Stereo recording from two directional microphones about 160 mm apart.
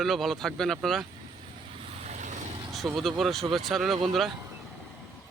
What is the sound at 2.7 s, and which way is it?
Speech, centre (ahead or behind).